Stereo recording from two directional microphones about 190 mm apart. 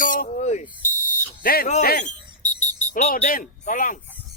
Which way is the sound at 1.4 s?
50° left (ahead or behind).